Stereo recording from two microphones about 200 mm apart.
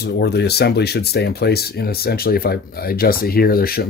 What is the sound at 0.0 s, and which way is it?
Speech, 55° left (ahead or behind).